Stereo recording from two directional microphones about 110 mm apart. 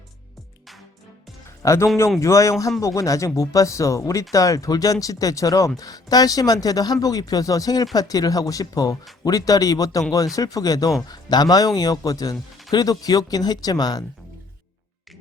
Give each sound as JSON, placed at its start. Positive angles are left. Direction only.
{"t": 1.6, "sound": "speech", "side_deg": 25}